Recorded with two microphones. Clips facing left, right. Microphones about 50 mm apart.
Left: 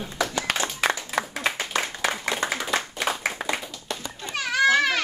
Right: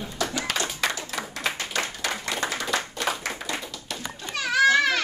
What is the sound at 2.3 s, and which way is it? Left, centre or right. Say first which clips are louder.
Clapping: left 1 dB; centre.